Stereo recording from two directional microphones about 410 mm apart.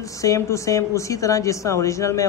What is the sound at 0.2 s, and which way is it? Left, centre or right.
Speech, centre.